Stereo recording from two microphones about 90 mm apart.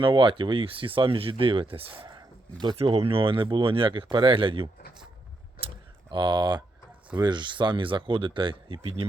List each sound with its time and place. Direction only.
0.0 s speech: 65° right (ahead or behind)
6.1 s speech: 60° right (ahead or behind); by 9.0 s 85° right